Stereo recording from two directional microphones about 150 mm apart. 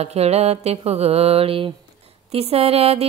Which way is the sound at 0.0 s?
45° right (ahead or behind).